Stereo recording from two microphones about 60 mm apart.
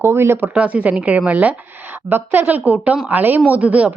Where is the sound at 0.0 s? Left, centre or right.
Right.